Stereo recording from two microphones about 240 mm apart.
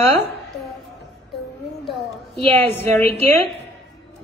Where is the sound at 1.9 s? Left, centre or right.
Centre.